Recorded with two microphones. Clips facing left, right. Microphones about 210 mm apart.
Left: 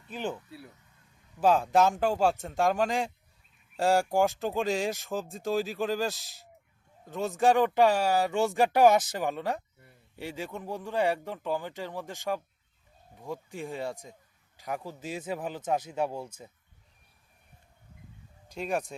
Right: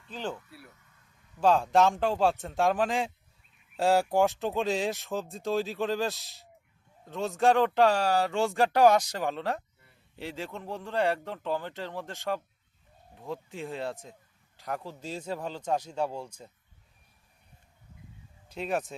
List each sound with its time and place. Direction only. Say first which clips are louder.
0.1 s speech: left 2 dB; 10° left (ahead or behind)
13.1 s speech: even; 10° left (ahead or behind)
16.2 s speech: left 1 dB; 5° left (ahead or behind)
18.5 s speech: even; centre (ahead or behind)